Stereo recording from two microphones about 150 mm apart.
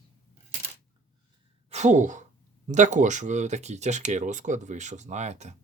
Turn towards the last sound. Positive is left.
turn(degrees=-50)  # may be behind; listen again after turning